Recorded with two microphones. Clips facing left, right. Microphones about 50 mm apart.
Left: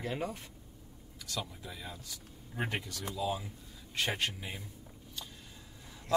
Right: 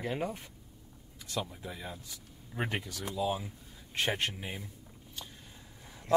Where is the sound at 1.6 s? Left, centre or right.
Right.